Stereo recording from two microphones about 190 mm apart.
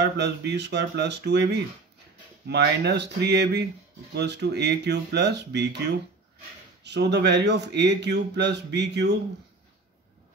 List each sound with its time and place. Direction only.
0.0 s a man's voice: 60° right (ahead or behind)
6.8 s a man's voice: 65° right (ahead or behind)